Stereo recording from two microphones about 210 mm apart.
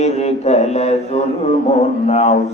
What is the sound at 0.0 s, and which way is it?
Speech, 30° left (ahead or behind).